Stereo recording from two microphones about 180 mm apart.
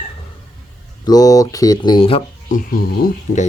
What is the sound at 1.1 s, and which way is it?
Speech, 20° left (ahead or behind).